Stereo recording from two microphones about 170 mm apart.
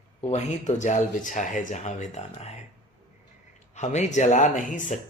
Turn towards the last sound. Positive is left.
turn(degrees=50)  # may be behind; listen again after turning